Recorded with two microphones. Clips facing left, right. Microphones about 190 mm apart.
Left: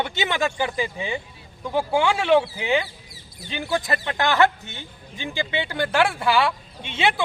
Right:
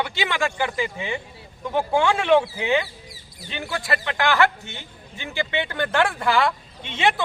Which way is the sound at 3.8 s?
20° left (ahead or behind).